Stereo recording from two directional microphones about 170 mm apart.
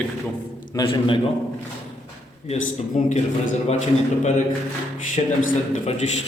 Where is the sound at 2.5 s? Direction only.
45° left (ahead or behind).